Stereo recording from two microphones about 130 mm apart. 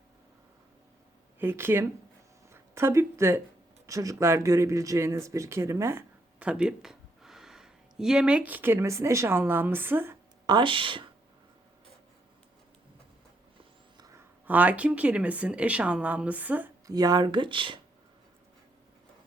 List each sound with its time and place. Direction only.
1.4 s speech: 20° right (ahead or behind)
6.4 s speech: 10° right (ahead or behind)
10.4 s speech: 35° right (ahead or behind)
13.9 s a sound: 30° right (ahead or behind)
14.4 s speech: 10° right (ahead or behind)
16.8 s speech: 30° right (ahead or behind)